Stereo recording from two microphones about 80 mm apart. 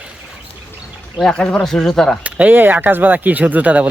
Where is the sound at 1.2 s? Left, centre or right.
Centre.